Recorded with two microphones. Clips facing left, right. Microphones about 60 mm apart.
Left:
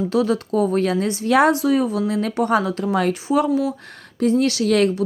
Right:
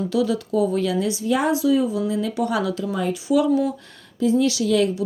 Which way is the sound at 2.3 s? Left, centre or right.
Left.